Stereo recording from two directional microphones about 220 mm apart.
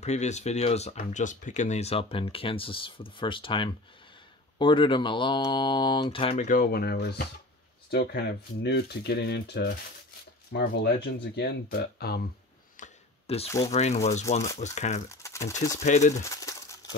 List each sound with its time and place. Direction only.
0.0 s speech: 30° left (ahead or behind)
12.7 s a sound: 30° left (ahead or behind)
13.7 s speech: 30° left (ahead or behind)
15.0 s crumpling: 15° left (ahead or behind)
15.8 s speech: 30° left (ahead or behind)
16.2 s bird: 15° left (ahead or behind)